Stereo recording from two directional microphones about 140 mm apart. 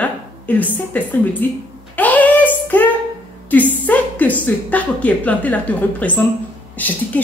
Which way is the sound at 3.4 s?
10° left (ahead or behind).